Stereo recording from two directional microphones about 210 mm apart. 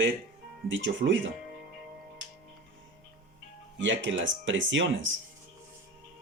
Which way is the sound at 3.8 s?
60° right (ahead or behind).